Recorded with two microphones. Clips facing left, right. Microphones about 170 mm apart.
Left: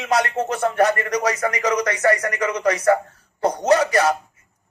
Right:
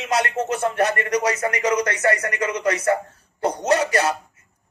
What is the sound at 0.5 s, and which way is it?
Speech, 25° right (ahead or behind).